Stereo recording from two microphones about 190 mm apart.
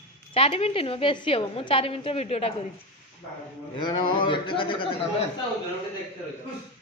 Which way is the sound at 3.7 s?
25° left (ahead or behind).